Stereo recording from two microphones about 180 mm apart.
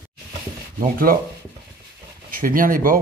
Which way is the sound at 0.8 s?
55° right (ahead or behind).